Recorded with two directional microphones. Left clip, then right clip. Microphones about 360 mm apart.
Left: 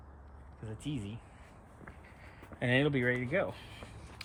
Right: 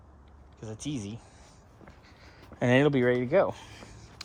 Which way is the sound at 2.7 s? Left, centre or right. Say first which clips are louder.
Right 7 dB; centre.